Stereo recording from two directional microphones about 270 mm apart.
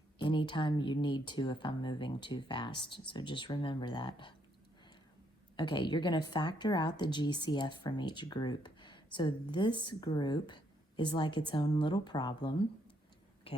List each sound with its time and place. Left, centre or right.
0.2 s a woman's voice: centre
5.5 s a woman's voice: centre